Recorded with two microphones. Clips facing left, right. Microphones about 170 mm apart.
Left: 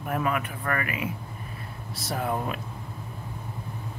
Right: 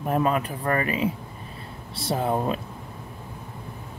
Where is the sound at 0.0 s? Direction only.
30° right (ahead or behind).